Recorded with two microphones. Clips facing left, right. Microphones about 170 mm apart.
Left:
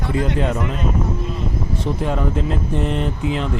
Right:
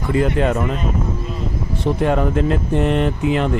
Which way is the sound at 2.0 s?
65° right (ahead or behind).